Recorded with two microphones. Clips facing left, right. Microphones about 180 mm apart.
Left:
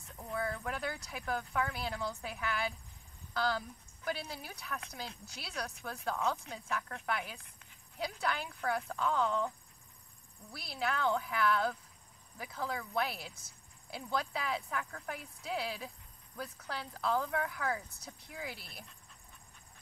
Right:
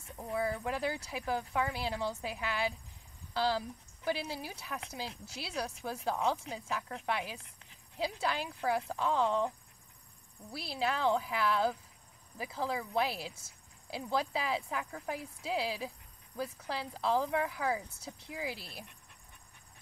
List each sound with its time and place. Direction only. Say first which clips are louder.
0.7 s speech: right 4 dB; 30° right (ahead or behind)
10.5 s speech: right 2 dB; 30° right (ahead or behind)
17.0 s speech: right 3 dB; 30° right (ahead or behind)
18.4 s speech: right 4 dB; 30° right (ahead or behind)